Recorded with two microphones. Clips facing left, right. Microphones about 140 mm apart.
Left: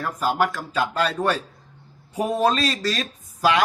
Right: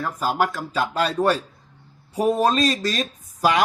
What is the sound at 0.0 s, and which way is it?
Speech, centre (ahead or behind).